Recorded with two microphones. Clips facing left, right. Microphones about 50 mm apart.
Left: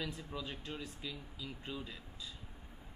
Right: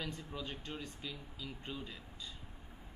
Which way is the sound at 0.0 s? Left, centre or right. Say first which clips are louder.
Left 1 dB; centre.